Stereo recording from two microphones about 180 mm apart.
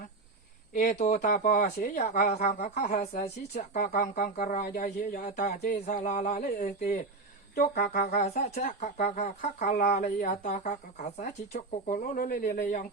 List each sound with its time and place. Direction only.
0.7 s speech: 45° left (ahead or behind)
2.0 s speech: 45° left (ahead or behind)
3.2 s speech: 40° left (ahead or behind)
11.9 s speech: 45° left (ahead or behind)